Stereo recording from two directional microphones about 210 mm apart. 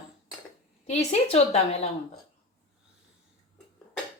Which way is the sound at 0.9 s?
30° left (ahead or behind).